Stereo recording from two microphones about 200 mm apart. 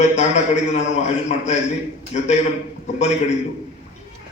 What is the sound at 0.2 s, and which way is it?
Speech, 35° left (ahead or behind).